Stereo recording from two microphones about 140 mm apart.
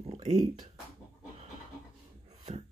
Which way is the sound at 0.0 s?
50° right (ahead or behind).